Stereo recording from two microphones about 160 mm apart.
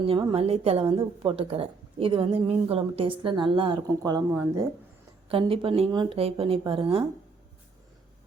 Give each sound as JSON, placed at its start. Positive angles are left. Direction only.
{"t": 0.0, "sound": "a woman's voice", "side_deg": -30}
{"t": 5.3, "sound": "a woman's voice", "side_deg": -35}